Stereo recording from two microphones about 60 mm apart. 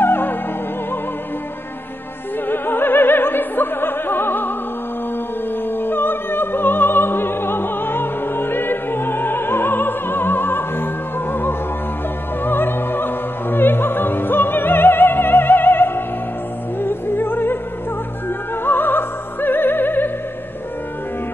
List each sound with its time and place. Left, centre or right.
0.0 s music: left
2.4 s opera: left
5.7 s opera: left
16.8 s music: left
18.6 s music: left